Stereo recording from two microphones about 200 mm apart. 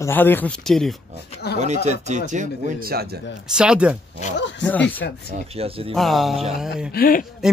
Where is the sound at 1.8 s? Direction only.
35° right (ahead or behind); by 3.2 s 50° right (ahead or behind).